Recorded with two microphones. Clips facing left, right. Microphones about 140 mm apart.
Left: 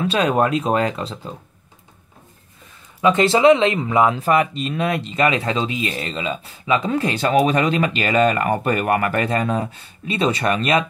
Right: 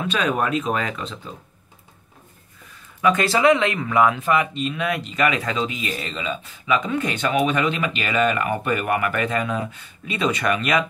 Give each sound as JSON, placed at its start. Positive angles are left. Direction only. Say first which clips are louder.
{"t": 0.1, "sound": "speech", "louder": "left 3 dB", "side_deg": 35}
{"t": 3.0, "sound": "speech", "louder": "left 4 dB", "side_deg": 25}
{"t": 4.2, "sound": "speech", "louder": "left 3 dB", "side_deg": 35}